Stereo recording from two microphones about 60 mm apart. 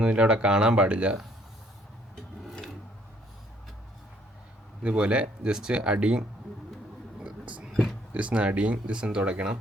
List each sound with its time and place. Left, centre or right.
0.0 s speech: centre
4.8 s speech: centre
7.3 s a sound: centre
8.1 s speech: right